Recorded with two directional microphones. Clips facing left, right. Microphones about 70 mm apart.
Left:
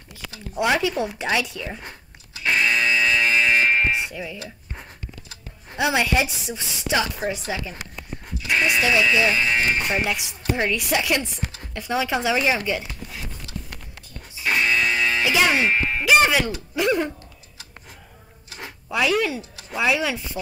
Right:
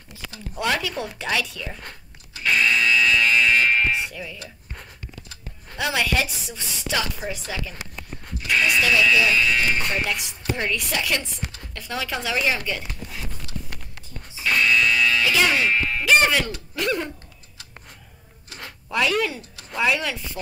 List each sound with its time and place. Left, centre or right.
0.6 s speech: centre
2.4 s buzzer: left
5.3 s speech: centre
9.8 s speech: centre
14.4 s music: left
16.1 s speech: centre
18.6 s speech: centre